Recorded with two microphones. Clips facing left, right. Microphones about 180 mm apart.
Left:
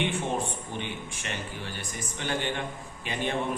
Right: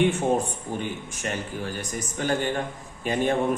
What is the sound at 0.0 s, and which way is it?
A man's voice, 45° right (ahead or behind).